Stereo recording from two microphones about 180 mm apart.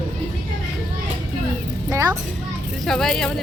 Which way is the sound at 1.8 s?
15° right (ahead or behind).